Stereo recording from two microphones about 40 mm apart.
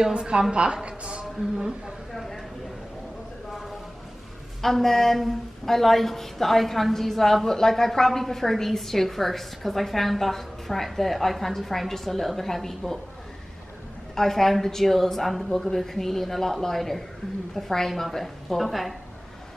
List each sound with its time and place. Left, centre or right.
0.0 s a woman's voice: right
2.1 s a sound: centre
4.6 s a woman's voice: centre
14.1 s a woman's voice: centre